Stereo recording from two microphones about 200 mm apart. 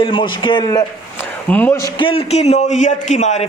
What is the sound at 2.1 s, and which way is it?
A man's voice, 30° left (ahead or behind).